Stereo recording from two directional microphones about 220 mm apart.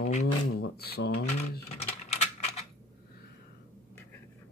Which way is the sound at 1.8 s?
30° left (ahead or behind).